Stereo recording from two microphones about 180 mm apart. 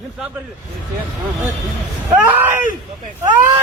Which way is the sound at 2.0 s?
10° right (ahead or behind).